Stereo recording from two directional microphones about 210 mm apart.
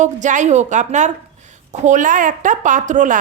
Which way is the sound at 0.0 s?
35° right (ahead or behind).